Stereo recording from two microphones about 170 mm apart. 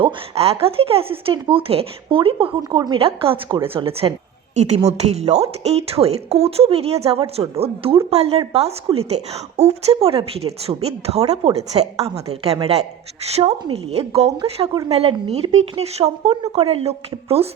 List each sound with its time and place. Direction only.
0.0 s a woman's voice: 35° right (ahead or behind)